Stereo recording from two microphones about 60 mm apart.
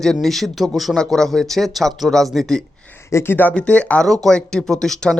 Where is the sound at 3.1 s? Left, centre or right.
Left.